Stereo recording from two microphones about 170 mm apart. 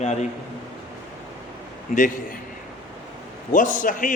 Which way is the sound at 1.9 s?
50° left (ahead or behind).